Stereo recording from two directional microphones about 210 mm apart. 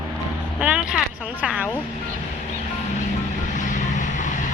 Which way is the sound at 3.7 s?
35° left (ahead or behind).